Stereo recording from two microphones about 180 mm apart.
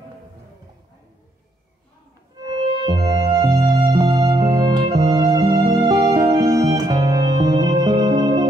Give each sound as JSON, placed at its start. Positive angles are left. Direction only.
{"t": 2.4, "sound": "music", "side_deg": -20}